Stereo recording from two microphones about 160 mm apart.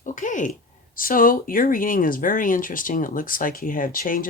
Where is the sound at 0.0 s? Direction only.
55° left (ahead or behind).